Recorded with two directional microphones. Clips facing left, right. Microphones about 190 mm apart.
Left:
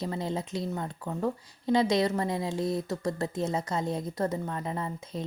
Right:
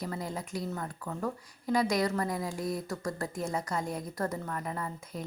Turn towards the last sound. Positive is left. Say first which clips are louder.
# left 3 dB
turn(degrees=25)  # may be behind; listen again after turning